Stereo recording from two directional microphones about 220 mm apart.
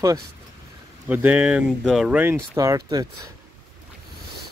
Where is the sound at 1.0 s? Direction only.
5° right (ahead or behind).